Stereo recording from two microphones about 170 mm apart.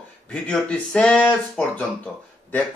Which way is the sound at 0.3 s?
5° left (ahead or behind).